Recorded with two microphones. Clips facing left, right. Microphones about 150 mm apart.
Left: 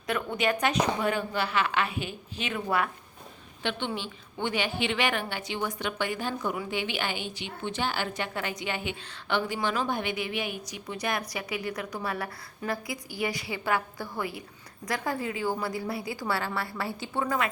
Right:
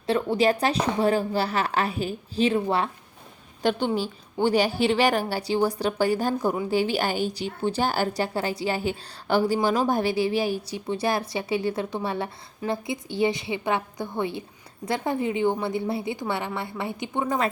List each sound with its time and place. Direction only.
0.1 s a woman's voice: 30° right (ahead or behind)
3.6 s a woman's voice: 40° right (ahead or behind)